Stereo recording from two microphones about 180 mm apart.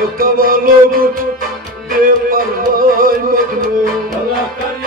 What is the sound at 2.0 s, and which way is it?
Music, 55° right (ahead or behind).